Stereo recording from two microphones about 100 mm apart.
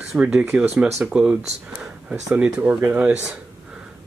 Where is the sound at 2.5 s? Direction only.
20° right (ahead or behind).